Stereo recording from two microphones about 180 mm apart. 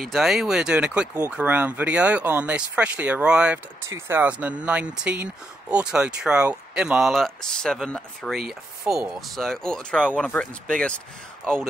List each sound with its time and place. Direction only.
0.0 s speech: centre (ahead or behind)